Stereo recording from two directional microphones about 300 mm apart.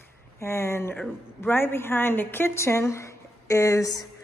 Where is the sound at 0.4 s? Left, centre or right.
Centre.